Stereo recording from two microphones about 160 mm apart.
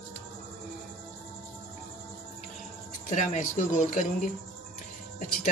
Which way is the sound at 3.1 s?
50° left (ahead or behind).